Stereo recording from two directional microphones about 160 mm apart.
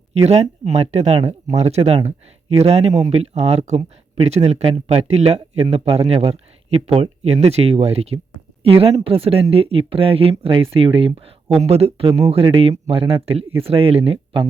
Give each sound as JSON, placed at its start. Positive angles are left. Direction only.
{"t": 0.3, "sound": "speech", "side_deg": -45}